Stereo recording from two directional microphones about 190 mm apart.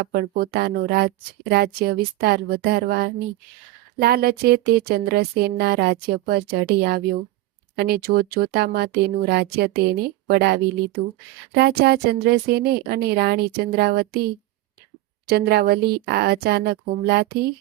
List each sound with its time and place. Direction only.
0.0 s a woman's voice: 50° right (ahead or behind)
15.3 s speech: 55° right (ahead or behind)